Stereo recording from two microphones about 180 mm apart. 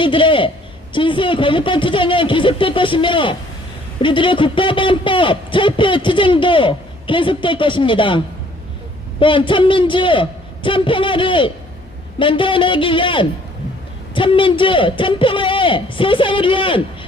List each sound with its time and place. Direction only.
0.0 s a man's voice: 30° left (ahead or behind)
9.2 s a man's voice: 30° left (ahead or behind)